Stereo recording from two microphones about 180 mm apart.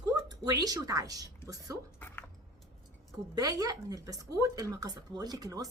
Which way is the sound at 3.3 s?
20° right (ahead or behind).